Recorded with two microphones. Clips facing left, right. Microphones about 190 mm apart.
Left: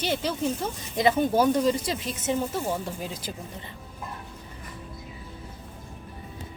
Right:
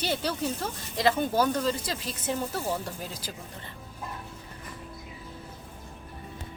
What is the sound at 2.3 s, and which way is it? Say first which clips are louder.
Speech: left 3 dB; centre (ahead or behind).